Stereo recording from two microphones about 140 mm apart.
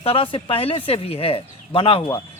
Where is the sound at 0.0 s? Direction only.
40° left (ahead or behind).